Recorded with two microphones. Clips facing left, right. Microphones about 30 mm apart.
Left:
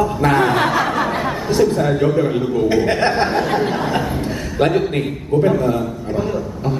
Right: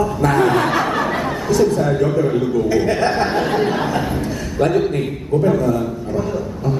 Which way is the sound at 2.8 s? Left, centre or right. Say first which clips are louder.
Left 1 dB; left.